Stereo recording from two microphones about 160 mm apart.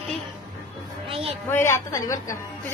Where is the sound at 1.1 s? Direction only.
35° right (ahead or behind).